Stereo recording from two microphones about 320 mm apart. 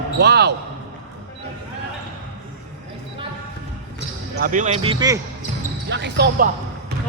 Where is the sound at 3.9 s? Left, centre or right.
Right.